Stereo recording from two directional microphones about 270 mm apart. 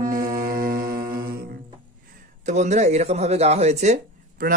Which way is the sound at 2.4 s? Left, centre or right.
Right.